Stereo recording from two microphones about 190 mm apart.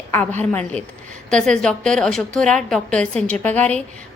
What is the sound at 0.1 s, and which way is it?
A woman's voice, 10° left (ahead or behind).